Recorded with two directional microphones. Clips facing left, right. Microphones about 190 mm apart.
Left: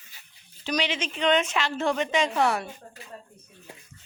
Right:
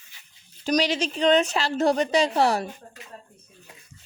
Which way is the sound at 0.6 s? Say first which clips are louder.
Right 5 dB; 40° right (ahead or behind).